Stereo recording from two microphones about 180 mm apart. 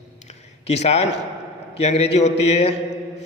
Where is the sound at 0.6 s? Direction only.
35° left (ahead or behind).